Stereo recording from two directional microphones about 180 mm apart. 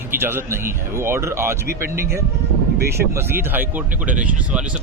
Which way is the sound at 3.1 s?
10° right (ahead or behind).